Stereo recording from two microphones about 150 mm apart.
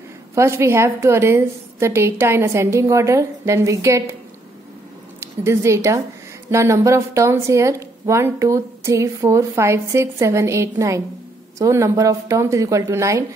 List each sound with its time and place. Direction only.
0.3 s a woman's voice: 20° right (ahead or behind)
5.2 s a woman's voice: 20° right (ahead or behind)